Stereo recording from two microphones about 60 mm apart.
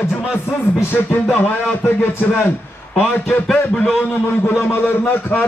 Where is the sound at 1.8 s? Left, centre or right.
Left.